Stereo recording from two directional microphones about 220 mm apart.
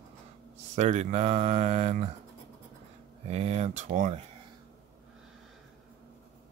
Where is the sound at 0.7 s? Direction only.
30° right (ahead or behind).